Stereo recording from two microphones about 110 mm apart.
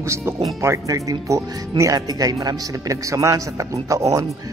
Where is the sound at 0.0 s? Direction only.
25° right (ahead or behind).